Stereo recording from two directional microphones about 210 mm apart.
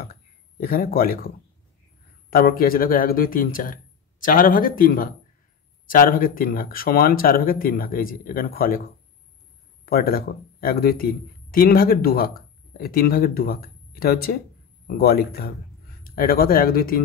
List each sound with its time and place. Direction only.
0.0 s speech: 45° left (ahead or behind)
2.3 s speech: 45° left (ahead or behind)
9.8 s speech: 45° left (ahead or behind)